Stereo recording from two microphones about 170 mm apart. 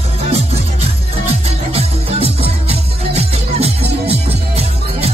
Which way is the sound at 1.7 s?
35° right (ahead or behind).